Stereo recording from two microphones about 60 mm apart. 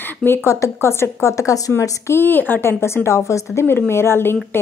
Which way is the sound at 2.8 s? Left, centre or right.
Left.